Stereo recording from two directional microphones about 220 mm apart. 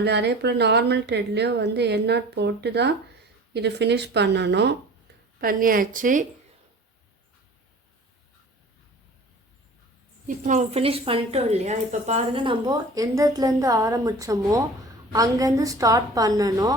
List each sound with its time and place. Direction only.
0.0 s a woman's voice: 50° right (ahead or behind)
5.4 s a woman's voice: 40° right (ahead or behind)
10.2 s a woman's voice: 35° right (ahead or behind); by 16.7 s 15° right (ahead or behind)